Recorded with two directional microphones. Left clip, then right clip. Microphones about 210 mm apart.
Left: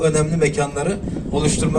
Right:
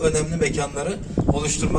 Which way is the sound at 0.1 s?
35° left (ahead or behind).